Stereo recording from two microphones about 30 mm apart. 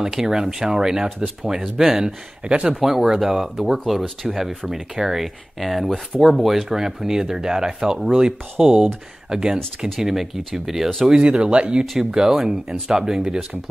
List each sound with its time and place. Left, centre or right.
0.0 s speech: centre
2.4 s speech: right
2.7 s speech: centre
4.0 s speech: centre
4.4 s speech: centre; by 9.6 s right
9.9 s speech: centre
11.1 s speech: right
11.5 s speech: right
12.0 s speech: centre